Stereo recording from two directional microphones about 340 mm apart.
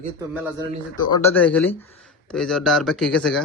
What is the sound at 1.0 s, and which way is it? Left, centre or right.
A man's voice, centre.